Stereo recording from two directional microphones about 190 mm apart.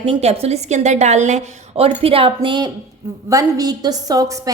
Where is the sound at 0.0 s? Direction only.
30° right (ahead or behind).